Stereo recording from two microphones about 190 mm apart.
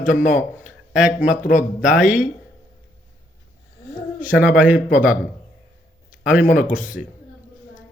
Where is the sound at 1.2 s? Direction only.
45° left (ahead or behind).